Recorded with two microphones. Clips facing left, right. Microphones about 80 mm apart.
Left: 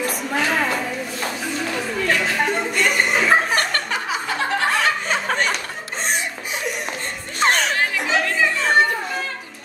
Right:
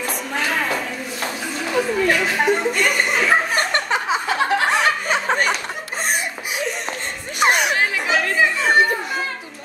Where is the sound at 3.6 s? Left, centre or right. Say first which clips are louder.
Right 2 dB; right.